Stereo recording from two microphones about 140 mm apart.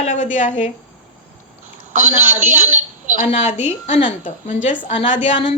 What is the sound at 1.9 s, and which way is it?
A woman's voice, 65° right (ahead or behind).